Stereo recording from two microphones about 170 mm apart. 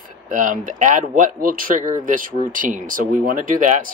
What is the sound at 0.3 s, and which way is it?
Speech, 50° right (ahead or behind).